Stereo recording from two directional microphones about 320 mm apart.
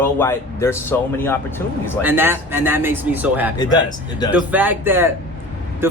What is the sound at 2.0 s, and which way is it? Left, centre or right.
Speech, centre.